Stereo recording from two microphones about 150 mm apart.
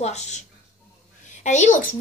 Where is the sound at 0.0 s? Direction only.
50° left (ahead or behind).